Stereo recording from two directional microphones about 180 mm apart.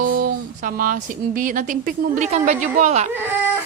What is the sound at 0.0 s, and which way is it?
Speech, 50° right (ahead or behind).